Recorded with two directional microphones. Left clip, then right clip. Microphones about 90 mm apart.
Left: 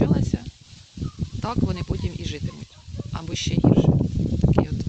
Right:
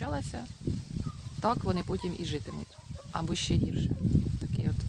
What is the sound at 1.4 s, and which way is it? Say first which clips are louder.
Speech: left 2 dB; 35° right (ahead or behind).